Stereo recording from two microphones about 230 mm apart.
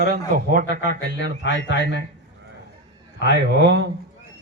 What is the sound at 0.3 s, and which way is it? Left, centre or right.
Speech, right.